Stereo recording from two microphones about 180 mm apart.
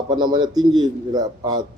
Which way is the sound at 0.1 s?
25° right (ahead or behind).